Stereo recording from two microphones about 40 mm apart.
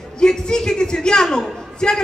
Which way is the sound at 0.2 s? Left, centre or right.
Centre.